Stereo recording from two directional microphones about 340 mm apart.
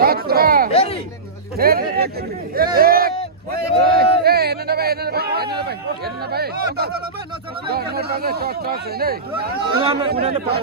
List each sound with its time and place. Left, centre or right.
0.0 s speech: right
0.7 s speech: centre
1.5 s speech: right
9.8 s speech: centre